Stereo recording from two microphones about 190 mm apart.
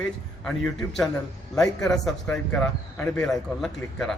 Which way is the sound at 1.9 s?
5° left (ahead or behind).